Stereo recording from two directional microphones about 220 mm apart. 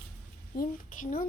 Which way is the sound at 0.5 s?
35° left (ahead or behind).